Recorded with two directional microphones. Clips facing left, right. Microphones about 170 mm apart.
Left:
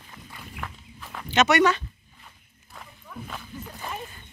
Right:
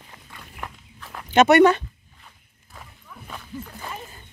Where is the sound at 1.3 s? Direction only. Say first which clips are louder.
Right 6 dB; 55° right (ahead or behind).